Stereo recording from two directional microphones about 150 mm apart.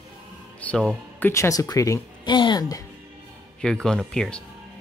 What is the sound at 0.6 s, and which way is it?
Music, 5° left (ahead or behind).